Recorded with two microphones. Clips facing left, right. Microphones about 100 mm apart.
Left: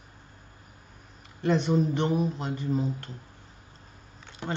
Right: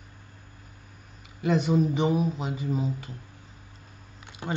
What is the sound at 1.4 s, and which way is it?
Speech, 5° right (ahead or behind).